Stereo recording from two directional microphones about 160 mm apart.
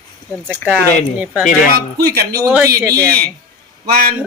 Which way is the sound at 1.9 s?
80° right.